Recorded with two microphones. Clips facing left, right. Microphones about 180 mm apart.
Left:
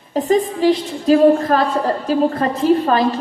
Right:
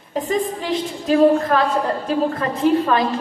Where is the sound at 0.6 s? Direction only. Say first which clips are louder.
Left 7 dB; 40° left (ahead or behind).